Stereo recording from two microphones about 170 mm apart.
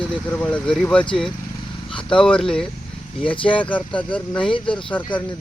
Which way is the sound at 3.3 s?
30° left (ahead or behind).